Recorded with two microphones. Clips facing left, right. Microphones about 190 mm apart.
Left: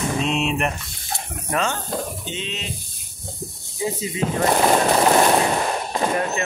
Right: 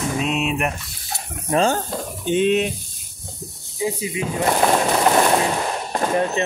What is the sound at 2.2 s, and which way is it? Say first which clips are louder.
Stir: right 14 dB; 55° right (ahead or behind).